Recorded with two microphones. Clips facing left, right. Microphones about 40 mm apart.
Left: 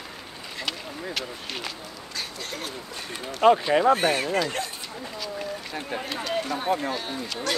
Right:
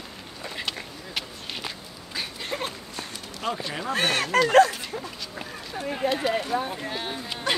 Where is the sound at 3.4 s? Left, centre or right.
Left.